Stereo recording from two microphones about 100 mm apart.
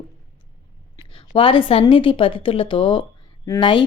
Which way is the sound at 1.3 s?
65° left (ahead or behind).